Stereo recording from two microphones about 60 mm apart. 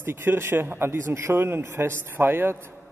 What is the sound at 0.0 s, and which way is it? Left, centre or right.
A man's voice, right.